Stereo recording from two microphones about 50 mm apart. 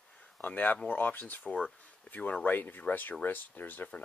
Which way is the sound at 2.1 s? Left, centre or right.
Left.